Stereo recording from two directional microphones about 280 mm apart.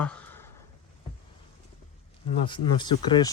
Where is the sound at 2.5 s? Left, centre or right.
Centre.